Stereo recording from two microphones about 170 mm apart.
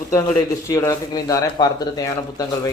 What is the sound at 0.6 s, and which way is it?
A man's voice, 20° left (ahead or behind).